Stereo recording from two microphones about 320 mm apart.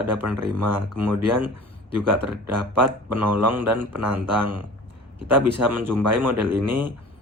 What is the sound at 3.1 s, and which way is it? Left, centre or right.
Speech, centre.